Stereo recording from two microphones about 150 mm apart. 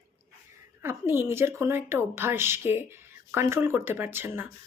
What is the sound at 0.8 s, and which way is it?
Speech, 15° right (ahead or behind).